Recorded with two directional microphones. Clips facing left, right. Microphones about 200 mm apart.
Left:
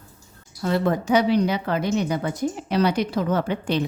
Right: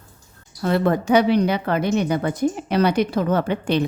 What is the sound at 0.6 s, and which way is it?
A woman's voice, 60° right (ahead or behind).